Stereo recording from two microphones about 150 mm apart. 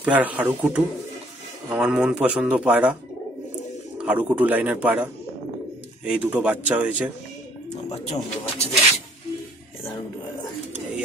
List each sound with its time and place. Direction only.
0.0 s speech: 10° right (ahead or behind)
4.0 s speech: 10° right (ahead or behind)
7.9 s speech: 45° left (ahead or behind)